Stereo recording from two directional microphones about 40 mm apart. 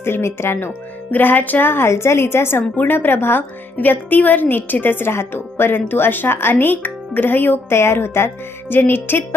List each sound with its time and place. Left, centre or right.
0.0 s speech: left
1.1 s music: left
1.7 s a woman's voice: left
2.7 s a woman's voice: left
3.8 s a woman's voice: left
5.9 s speech: left
6.5 s a woman's voice: left
8.7 s a woman's voice: left